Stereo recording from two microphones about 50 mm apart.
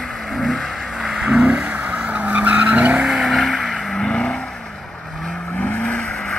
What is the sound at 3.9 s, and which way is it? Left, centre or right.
Vehicle, centre.